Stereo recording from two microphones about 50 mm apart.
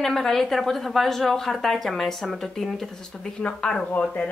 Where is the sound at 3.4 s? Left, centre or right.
Left.